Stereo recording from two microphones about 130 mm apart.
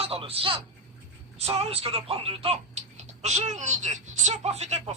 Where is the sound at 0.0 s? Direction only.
50° right (ahead or behind).